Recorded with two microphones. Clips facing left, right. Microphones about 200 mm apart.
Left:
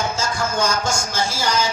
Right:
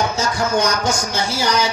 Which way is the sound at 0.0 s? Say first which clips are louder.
Right 3 dB; 65° right (ahead or behind).